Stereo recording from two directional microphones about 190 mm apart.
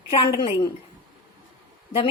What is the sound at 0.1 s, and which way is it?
Speech, 30° left (ahead or behind).